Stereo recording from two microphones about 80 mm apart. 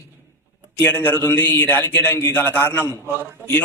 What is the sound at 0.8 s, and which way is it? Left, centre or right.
A man's voice, left.